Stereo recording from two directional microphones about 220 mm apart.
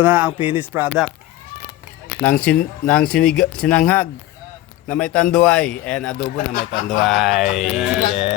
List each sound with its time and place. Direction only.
0.0 s speech: 5° right (ahead or behind)
2.2 s speech: 5° left (ahead or behind)
6.3 s speech: 40° left (ahead or behind)
7.0 s speech: centre (ahead or behind)
8.1 s speech: 25° left (ahead or behind)